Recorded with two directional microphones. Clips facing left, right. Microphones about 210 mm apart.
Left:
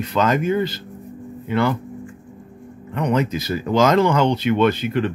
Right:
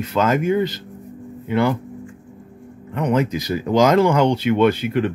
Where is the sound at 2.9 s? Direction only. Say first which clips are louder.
Right 1 dB; 5° right (ahead or behind).